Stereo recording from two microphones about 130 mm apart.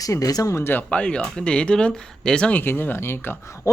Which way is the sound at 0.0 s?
25° left (ahead or behind).